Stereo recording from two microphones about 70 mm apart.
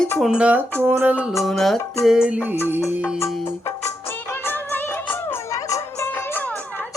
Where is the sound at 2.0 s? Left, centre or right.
Centre.